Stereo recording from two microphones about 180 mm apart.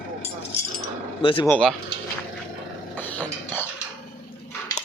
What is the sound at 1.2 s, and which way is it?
Speech, 30° left (ahead or behind).